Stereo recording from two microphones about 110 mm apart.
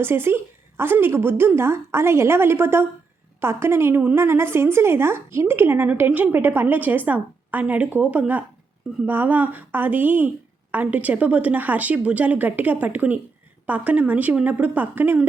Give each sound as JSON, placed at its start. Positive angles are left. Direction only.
{"t": 0.0, "sound": "a woman's voice", "side_deg": -20}